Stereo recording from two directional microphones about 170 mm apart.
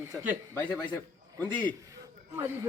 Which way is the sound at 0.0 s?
15° right (ahead or behind).